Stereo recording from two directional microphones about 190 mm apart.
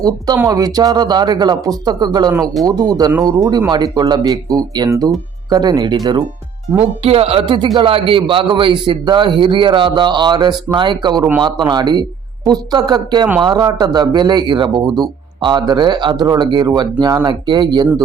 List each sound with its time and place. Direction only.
0.3 s speech: 15° right (ahead or behind)